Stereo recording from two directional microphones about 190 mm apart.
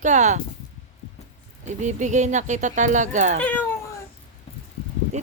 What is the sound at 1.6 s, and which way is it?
Speech, 40° right (ahead or behind).